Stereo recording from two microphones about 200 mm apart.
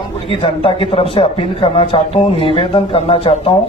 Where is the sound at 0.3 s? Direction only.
25° left (ahead or behind).